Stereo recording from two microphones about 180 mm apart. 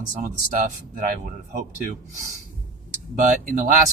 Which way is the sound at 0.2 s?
45° right (ahead or behind).